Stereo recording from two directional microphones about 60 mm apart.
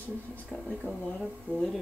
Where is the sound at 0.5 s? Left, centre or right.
Left.